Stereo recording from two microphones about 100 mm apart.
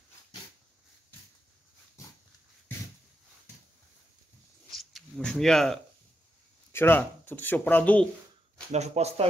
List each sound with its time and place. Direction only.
4.6 s a sound: centre (ahead or behind)
6.7 s speech: 20° left (ahead or behind)
8.7 s speech: 90° right